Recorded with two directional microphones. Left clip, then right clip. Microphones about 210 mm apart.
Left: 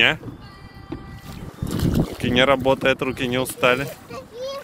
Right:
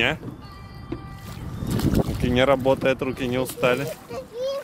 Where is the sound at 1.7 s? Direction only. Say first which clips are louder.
Even; 30° right (ahead or behind).